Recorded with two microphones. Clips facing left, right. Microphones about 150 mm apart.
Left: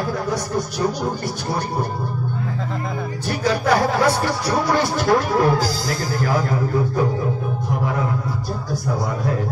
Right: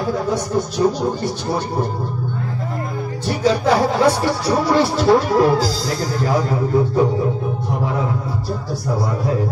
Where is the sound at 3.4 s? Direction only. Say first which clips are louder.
Right 2 dB; 30° right (ahead or behind).